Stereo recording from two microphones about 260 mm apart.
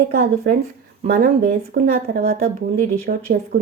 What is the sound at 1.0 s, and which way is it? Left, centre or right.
A woman's voice, right.